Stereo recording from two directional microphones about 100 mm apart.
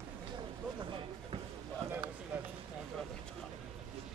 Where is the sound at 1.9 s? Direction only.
20° right (ahead or behind).